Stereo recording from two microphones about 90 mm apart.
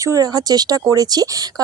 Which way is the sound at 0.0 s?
40° right (ahead or behind).